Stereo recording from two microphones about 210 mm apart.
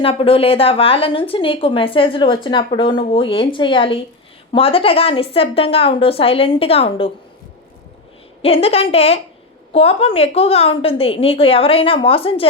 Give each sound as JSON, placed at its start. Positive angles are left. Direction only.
{"t": 0.0, "sound": "a woman's voice", "side_deg": 25}
{"t": 8.4, "sound": "a woman's voice", "side_deg": 30}